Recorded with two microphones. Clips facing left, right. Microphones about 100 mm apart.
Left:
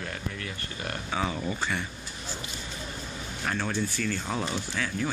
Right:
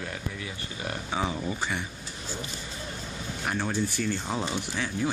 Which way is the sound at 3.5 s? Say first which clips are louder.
Right 1 dB; 15° right (ahead or behind).